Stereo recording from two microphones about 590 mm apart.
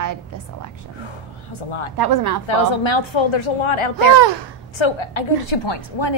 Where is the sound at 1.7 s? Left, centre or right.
Left.